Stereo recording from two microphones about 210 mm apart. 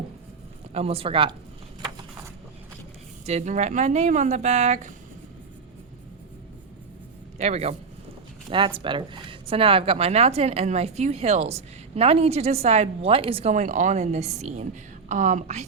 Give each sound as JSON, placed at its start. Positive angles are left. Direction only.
{"t": 0.7, "sound": "speech", "side_deg": -30}
{"t": 3.2, "sound": "speech", "side_deg": -35}
{"t": 7.3, "sound": "speech", "side_deg": -30}